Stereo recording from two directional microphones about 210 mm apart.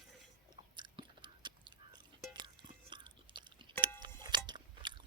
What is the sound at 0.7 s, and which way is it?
Biting, 20° right (ahead or behind).